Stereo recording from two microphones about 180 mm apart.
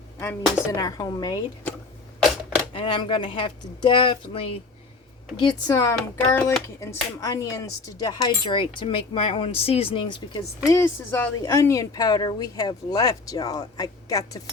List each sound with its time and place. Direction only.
0.2 s speech: 15° left (ahead or behind)
2.7 s speech: 30° left (ahead or behind)
10.7 s speech: 15° left (ahead or behind)